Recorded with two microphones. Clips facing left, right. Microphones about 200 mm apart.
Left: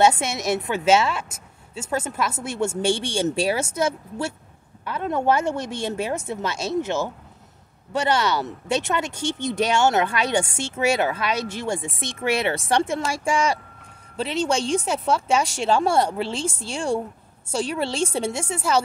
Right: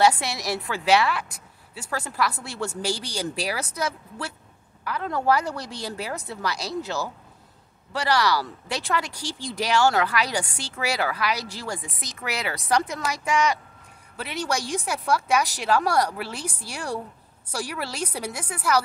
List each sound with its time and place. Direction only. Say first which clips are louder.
0.0 s speech: left 2 dB; 20° left (ahead or behind)